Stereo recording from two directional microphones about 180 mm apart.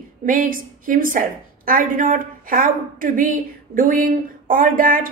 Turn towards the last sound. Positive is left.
turn(degrees=-50)  # may be behind; listen again after turning